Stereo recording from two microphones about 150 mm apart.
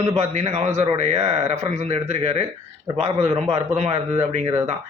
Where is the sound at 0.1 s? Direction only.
50° right (ahead or behind).